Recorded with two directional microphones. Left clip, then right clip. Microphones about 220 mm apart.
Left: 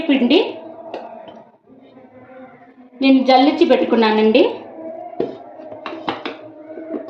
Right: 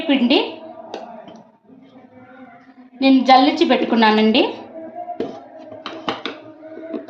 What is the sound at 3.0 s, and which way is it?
A woman's voice, 40° right (ahead or behind).